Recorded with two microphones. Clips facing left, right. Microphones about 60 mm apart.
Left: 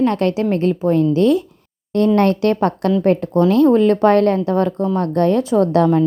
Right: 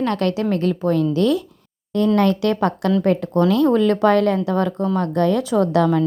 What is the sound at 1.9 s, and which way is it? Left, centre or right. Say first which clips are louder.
A woman's voice: left 3 dB; left.